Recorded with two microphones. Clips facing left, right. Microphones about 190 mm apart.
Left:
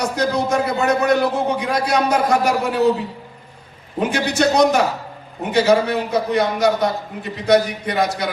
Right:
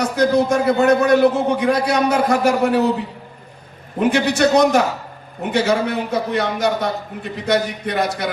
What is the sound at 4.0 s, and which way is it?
Speech, 60° right (ahead or behind).